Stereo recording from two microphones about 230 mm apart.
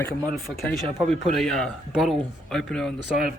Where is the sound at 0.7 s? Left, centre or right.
Centre.